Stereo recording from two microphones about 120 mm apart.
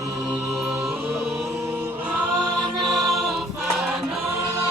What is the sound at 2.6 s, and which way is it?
Choir, centre (ahead or behind).